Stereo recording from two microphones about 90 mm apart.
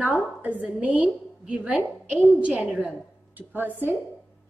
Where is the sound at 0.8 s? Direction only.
15° right (ahead or behind).